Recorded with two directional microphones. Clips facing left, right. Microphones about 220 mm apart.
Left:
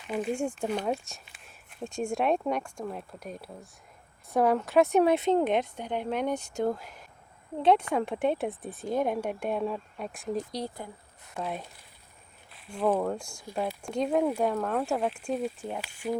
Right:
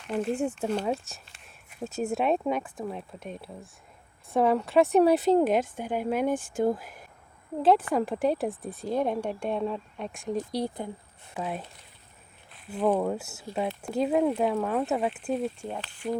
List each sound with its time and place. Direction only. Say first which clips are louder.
0.0 s speech: right 2 dB; centre (ahead or behind)
6.3 s speech: right 3 dB; 50° right (ahead or behind)
6.6 s speech: right 3 dB; 5° right (ahead or behind)
10.5 s speech: right 5 dB; 10° right (ahead or behind); by 16.1 s 10° left (ahead or behind)